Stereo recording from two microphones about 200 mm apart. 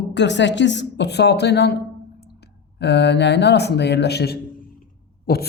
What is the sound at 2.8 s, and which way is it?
Speech, 60° left (ahead or behind).